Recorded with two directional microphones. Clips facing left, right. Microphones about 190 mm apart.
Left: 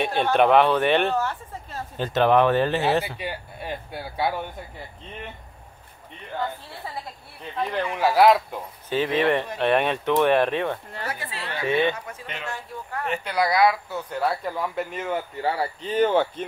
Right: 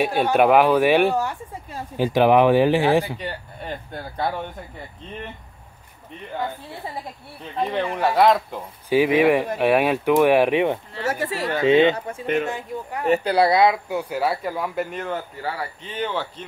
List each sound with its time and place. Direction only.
0.0 s speech: 5° right (ahead or behind)
3.2 s speech: 5° left (ahead or behind)
7.7 s speech: centre (ahead or behind)
8.8 s speech: 10° right (ahead or behind)
11.1 s speech: 45° right (ahead or behind)
11.6 s speech: 20° right (ahead or behind)
13.0 s speech: 35° right (ahead or behind); by 15.1 s centre (ahead or behind)
15.4 s speech: 30° left (ahead or behind); by 16.4 s 50° left (ahead or behind)